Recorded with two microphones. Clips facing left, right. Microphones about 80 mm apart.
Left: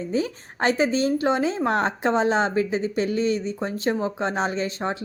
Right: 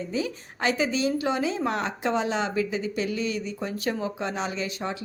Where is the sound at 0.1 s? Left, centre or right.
Left.